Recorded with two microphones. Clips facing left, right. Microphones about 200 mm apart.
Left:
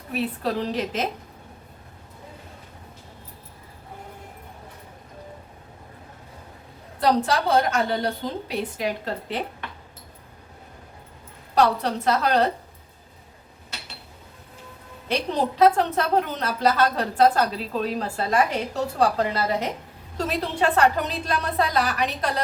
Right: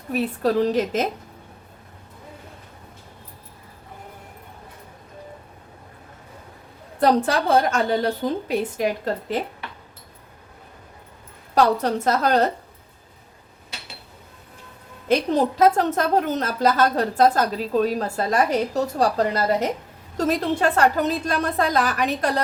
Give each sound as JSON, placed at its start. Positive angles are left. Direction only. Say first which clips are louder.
{"t": 0.1, "sound": "a woman's voice", "louder": "right 5 dB", "side_deg": -45}
{"t": 7.0, "sound": "a woman's voice", "louder": "right 2 dB", "side_deg": -50}
{"t": 11.5, "sound": "a woman's voice", "louder": "right 2 dB", "side_deg": -45}
{"t": 15.7, "sound": "a woman's voice", "louder": "right 2 dB", "side_deg": -45}